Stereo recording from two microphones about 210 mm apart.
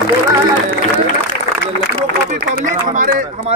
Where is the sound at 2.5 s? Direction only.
40° right (ahead or behind).